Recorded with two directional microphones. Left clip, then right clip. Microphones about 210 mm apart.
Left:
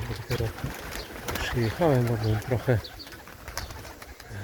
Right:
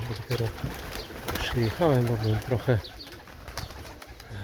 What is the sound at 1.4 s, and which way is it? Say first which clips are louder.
Speech: even; 5° right (ahead or behind).